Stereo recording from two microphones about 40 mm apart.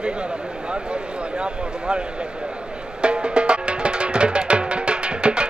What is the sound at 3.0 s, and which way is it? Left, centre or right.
Music, right.